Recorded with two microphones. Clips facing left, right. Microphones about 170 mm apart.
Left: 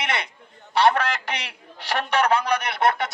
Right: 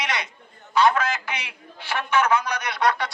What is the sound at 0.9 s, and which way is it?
Speech, 65° left (ahead or behind).